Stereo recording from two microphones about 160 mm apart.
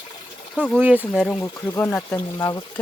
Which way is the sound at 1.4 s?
15° left (ahead or behind).